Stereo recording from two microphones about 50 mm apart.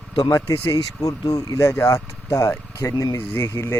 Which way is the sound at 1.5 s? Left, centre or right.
Left.